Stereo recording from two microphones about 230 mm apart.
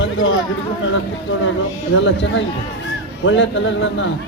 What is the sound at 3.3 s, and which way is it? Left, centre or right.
Speech, left.